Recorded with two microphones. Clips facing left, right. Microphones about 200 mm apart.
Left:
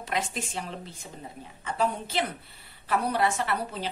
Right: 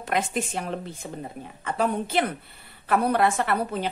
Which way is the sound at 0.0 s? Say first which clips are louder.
Right 5 dB; 55° right (ahead or behind).